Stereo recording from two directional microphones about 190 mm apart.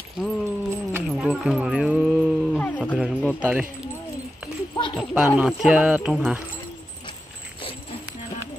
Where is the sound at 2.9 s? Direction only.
5° right (ahead or behind).